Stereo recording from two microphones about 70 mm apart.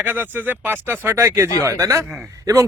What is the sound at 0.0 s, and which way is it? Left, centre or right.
Speech, right.